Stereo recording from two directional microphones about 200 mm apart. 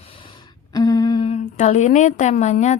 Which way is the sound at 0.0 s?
25° left (ahead or behind).